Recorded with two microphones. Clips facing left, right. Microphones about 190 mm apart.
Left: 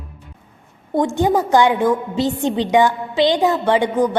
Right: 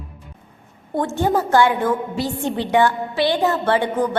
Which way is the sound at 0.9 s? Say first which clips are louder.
Left 3 dB; 15° left (ahead or behind).